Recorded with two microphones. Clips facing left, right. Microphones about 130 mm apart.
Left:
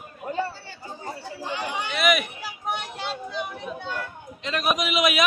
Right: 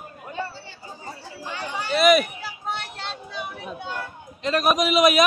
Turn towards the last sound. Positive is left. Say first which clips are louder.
# right 5 dB
turn(degrees=-40)  # may be behind; listen again after turning